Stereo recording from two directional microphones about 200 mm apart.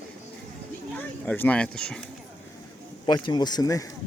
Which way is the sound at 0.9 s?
10° left (ahead or behind).